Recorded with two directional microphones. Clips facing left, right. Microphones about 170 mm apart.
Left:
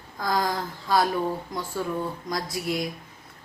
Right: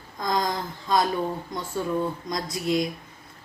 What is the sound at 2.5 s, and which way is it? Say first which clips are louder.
Speech: right 6 dB; 20° right (ahead or behind).